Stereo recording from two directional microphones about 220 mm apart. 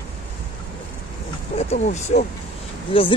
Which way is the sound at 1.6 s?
30° left (ahead or behind).